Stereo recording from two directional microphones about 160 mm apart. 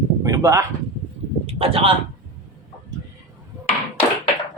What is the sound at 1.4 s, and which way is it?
Speech, 35° right (ahead or behind).